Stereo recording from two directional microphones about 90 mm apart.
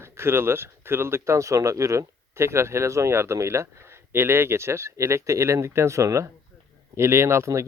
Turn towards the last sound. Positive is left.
turn(degrees=-35)  # may be behind; listen again after turning